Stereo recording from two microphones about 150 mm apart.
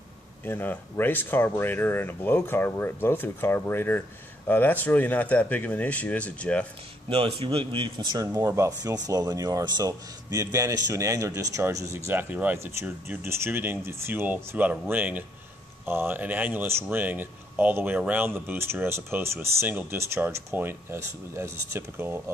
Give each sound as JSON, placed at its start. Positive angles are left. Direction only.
{"t": 0.5, "sound": "speech", "side_deg": 15}
{"t": 7.1, "sound": "a man's voice", "side_deg": -40}